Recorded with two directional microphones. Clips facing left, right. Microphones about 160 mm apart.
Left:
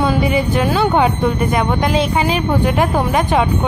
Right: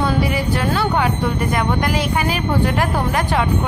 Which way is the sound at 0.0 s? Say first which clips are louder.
Left 3 dB; 20° left (ahead or behind).